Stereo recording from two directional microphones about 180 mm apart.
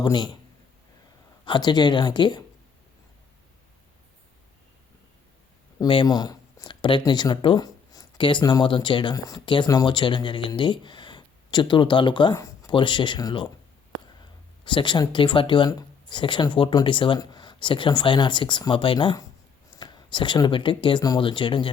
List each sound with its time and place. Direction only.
0.0 s speech: 25° left (ahead or behind)
1.5 s speech: 25° left (ahead or behind)
5.8 s speech: 25° left (ahead or behind)
14.6 s speech: 25° left (ahead or behind)